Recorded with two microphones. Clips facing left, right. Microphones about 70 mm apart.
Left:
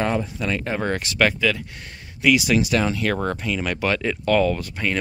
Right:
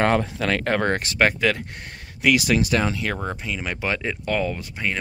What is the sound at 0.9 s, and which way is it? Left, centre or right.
Speech, right.